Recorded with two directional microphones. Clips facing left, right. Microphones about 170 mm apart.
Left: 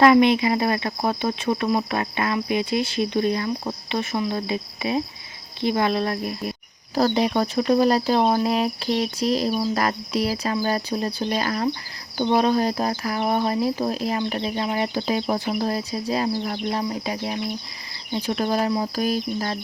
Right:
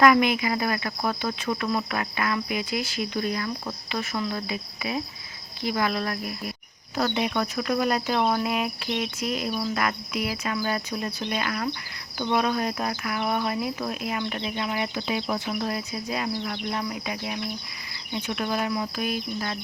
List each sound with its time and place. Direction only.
0.0 s speech: 25° left (ahead or behind)